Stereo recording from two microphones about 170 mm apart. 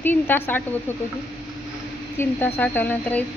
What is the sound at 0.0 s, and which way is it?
Speech, 10° left (ahead or behind).